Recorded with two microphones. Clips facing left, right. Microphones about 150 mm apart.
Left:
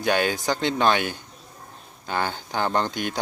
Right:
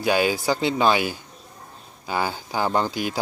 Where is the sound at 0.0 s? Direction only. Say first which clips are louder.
Right 2 dB; 5° right (ahead or behind).